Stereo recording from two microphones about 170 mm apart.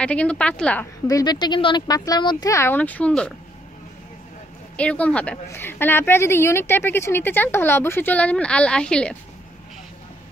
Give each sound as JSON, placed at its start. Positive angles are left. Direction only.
{"t": 0.0, "sound": "a woman's voice", "side_deg": 5}
{"t": 1.0, "sound": "speech", "side_deg": 20}
{"t": 4.7, "sound": "a woman's voice", "side_deg": 10}